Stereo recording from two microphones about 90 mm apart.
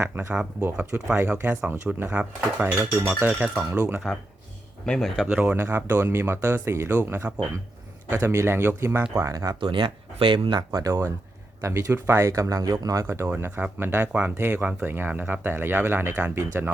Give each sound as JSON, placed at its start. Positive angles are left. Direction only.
{"t": 0.0, "sound": "speech", "side_deg": -25}
{"t": 4.9, "sound": "speech", "side_deg": 5}
{"t": 5.3, "sound": "speech", "side_deg": -15}
{"t": 9.6, "sound": "speech", "side_deg": -70}
{"t": 10.7, "sound": "speech", "side_deg": -40}